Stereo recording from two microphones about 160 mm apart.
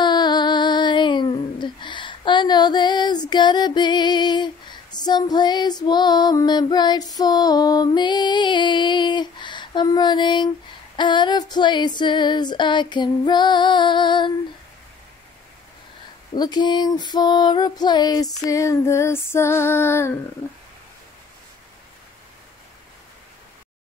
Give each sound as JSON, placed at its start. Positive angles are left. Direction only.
{"t": 0.0, "sound": "female singing", "side_deg": 25}
{"t": 16.3, "sound": "female singing", "side_deg": 25}